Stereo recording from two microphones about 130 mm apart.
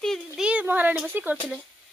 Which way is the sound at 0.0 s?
5° left (ahead or behind).